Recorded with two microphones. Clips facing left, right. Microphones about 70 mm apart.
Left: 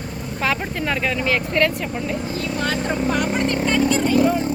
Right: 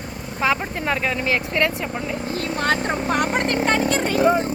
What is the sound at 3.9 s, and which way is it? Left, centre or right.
Vehicle, right.